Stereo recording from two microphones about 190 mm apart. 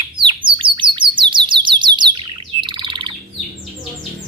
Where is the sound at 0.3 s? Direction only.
25° right (ahead or behind).